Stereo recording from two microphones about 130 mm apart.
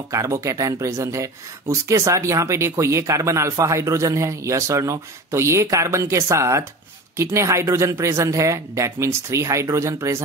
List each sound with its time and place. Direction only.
0.1 s speech: 25° right (ahead or behind)